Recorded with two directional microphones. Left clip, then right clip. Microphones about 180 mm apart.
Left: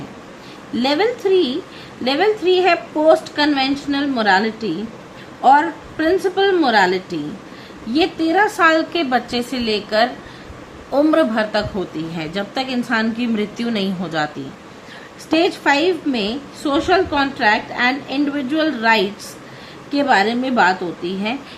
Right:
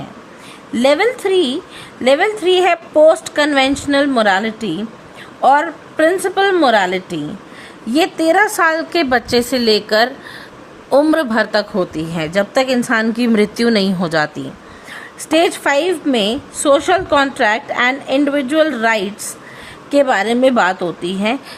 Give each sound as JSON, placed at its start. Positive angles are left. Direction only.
{"t": 0.8, "sound": "a woman's voice", "side_deg": -45}
{"t": 7.9, "sound": "a woman's voice", "side_deg": -50}
{"t": 15.3, "sound": "a woman's voice", "side_deg": -50}